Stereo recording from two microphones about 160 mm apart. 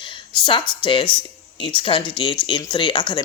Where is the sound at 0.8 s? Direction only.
30° left (ahead or behind).